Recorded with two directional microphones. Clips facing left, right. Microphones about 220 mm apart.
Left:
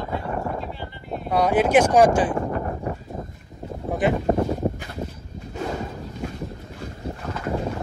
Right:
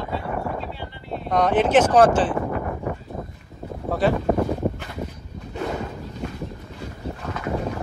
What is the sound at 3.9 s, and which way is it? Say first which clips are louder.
Boat: right 1 dB; 20° left (ahead or behind).